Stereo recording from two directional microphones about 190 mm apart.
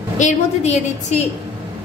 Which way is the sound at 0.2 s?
35° left (ahead or behind).